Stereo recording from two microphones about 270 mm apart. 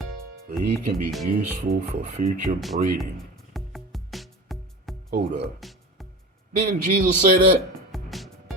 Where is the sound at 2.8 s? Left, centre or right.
Right.